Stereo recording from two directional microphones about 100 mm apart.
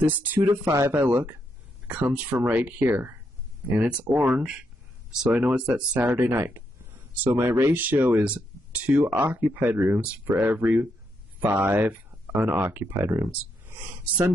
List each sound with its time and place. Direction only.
0.0 s speech: 20° right (ahead or behind)